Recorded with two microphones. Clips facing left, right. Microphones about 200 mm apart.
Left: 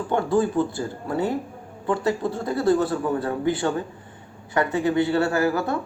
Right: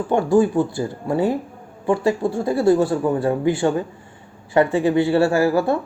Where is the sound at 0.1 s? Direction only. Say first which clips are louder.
Right 5 dB; 25° right (ahead or behind).